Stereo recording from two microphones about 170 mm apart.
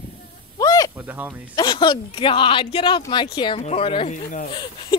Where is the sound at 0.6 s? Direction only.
20° left (ahead or behind).